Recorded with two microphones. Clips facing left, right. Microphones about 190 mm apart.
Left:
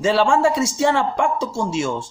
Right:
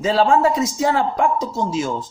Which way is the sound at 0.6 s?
75° left (ahead or behind).